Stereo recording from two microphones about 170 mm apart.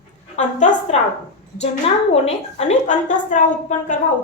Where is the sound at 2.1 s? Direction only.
40° left (ahead or behind).